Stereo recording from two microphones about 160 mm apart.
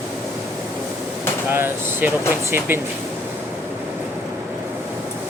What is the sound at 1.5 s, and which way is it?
Speech, 15° right (ahead or behind).